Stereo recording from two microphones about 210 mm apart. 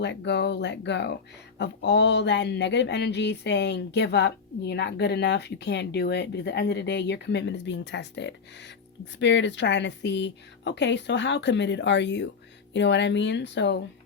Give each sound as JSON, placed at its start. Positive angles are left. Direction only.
{"t": 0.0, "sound": "speech", "side_deg": 55}